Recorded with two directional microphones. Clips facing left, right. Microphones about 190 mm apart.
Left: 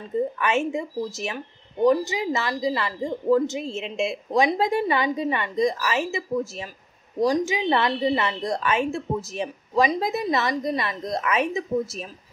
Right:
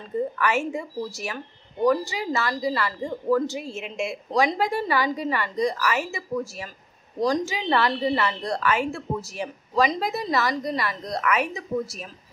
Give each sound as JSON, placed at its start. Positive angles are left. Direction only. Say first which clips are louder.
{"t": 0.4, "sound": "a woman's voice", "louder": "left 1 dB", "side_deg": 20}